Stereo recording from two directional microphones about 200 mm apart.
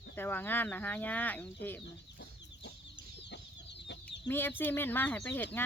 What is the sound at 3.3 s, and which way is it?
Chicken, 60° left (ahead or behind).